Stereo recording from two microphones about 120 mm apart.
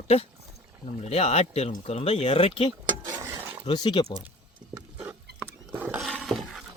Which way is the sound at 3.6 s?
40° left (ahead or behind).